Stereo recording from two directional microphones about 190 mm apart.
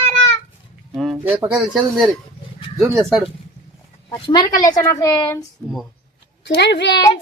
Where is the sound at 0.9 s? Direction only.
Centre (ahead or behind).